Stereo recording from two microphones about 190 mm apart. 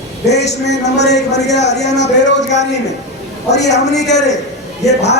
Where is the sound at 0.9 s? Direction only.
65° left (ahead or behind).